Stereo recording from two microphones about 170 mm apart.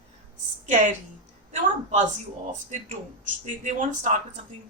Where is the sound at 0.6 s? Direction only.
50° right (ahead or behind).